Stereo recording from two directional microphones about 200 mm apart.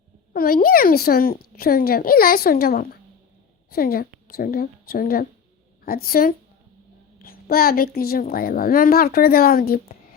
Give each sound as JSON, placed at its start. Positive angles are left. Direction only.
{"t": 0.3, "sound": "a woman's voice", "side_deg": 45}